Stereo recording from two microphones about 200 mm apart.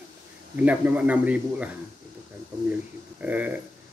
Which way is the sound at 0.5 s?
10° right (ahead or behind).